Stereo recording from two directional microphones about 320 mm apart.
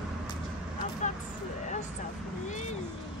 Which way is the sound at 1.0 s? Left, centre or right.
Left.